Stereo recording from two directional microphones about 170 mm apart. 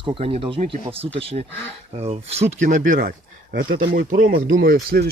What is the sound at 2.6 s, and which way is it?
Speech, 50° right (ahead or behind).